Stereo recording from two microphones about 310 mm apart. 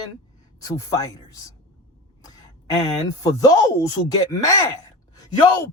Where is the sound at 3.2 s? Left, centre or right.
Centre.